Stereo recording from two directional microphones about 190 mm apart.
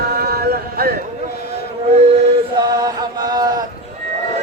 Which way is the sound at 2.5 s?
20° right (ahead or behind).